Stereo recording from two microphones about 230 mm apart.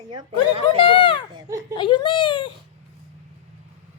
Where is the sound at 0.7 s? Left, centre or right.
Left.